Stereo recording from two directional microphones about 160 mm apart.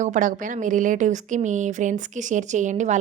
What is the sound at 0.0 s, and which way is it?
A woman's voice, 55° right (ahead or behind).